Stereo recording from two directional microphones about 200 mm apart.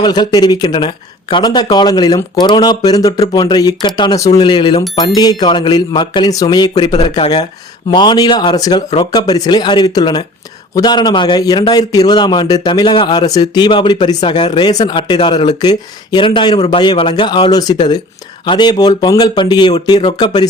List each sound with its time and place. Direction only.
0.0 s speech: 20° left (ahead or behind)